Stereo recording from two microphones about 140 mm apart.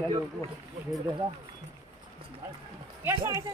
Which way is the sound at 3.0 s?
20° right (ahead or behind).